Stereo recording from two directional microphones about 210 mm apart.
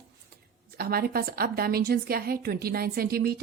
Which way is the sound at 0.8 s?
45° right (ahead or behind).